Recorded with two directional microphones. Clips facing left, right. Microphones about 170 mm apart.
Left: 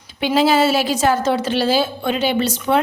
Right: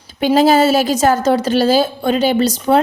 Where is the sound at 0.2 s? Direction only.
45° right (ahead or behind).